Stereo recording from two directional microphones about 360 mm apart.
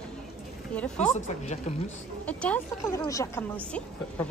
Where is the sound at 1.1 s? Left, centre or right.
Centre.